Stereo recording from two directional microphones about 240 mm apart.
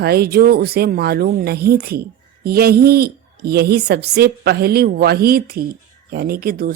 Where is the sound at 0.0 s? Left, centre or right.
Right.